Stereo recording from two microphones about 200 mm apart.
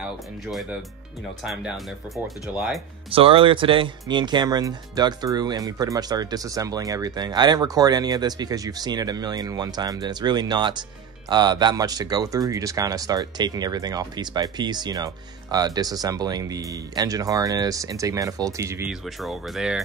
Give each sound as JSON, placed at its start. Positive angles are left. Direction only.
{"t": 0.5, "sound": "speech", "side_deg": 0}
{"t": 3.1, "sound": "speech", "side_deg": -25}
{"t": 18.9, "sound": "speech", "side_deg": 0}